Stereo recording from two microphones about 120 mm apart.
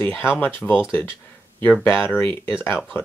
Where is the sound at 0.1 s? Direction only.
15° left (ahead or behind).